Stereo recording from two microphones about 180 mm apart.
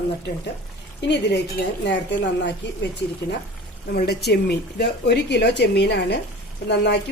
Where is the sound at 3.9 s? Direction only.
65° left (ahead or behind).